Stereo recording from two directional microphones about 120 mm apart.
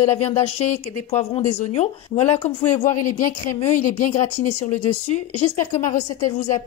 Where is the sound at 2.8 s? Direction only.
90° left; by 4.9 s 65° left (ahead or behind).